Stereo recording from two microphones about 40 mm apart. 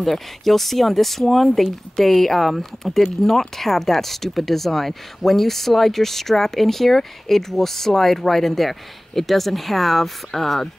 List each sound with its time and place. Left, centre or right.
0.0 s speech: centre